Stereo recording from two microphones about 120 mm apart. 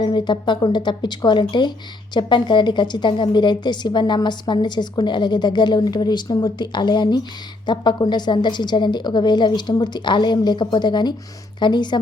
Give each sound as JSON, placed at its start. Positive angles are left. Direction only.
{"t": 0.0, "sound": "a woman's voice", "side_deg": 40}